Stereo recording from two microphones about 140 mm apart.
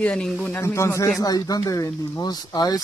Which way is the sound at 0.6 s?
20° left (ahead or behind).